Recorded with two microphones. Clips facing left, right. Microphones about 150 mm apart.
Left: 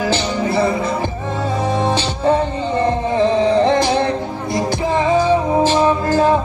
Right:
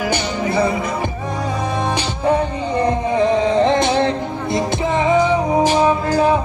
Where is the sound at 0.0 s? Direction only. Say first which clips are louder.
Left 2 dB; 15° right (ahead or behind).